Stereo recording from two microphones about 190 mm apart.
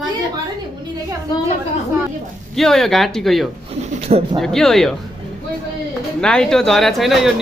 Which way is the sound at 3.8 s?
35° right (ahead or behind).